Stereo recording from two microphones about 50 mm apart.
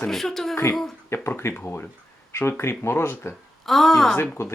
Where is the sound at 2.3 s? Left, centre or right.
Left.